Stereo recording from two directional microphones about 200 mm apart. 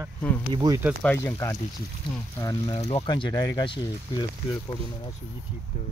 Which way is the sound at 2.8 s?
30° left (ahead or behind).